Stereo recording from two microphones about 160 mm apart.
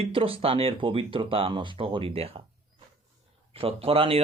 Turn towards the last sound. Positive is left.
turn(degrees=-35)  # may be behind; listen again after turning